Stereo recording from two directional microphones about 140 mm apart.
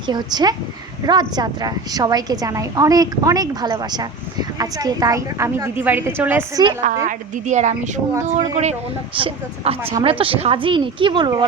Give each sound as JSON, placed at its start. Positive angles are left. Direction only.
{"t": 0.0, "sound": "a woman's voice", "side_deg": -30}
{"t": 6.8, "sound": "a woman's voice", "side_deg": -65}
{"t": 9.1, "sound": "a woman's voice", "side_deg": -40}